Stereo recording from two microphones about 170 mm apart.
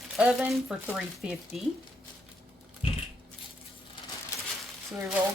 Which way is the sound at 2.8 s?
35° left (ahead or behind).